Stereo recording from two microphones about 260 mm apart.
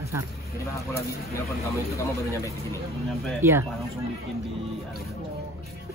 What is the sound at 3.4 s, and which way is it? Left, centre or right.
Speech, centre.